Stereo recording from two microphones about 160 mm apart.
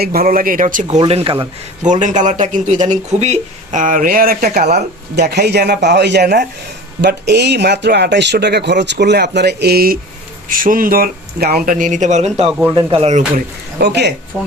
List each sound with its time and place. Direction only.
0.0 s speech: 70° right (ahead or behind); by 1.4 s 35° right (ahead or behind)
1.8 s speech: 50° right (ahead or behind); by 4.6 s 70° right (ahead or behind)
4.7 s speech: 90° right
7.0 s speech: 90° right; by 10.0 s 70° right (ahead or behind)
10.5 s speech: 60° right (ahead or behind)
12.5 s speech: 5° right (ahead or behind)
12.7 s speech: 35° right (ahead or behind)
13.3 s speech: 80° right